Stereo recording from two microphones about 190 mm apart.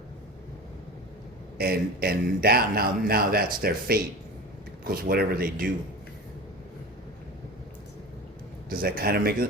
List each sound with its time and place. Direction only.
1.5 s speech: 55° right (ahead or behind)
8.7 s speech: 50° right (ahead or behind)